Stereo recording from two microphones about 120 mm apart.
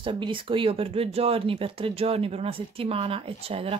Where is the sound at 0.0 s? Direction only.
45° right (ahead or behind).